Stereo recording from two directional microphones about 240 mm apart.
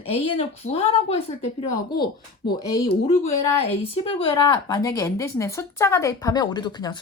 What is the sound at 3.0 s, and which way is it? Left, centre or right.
A woman's voice, left.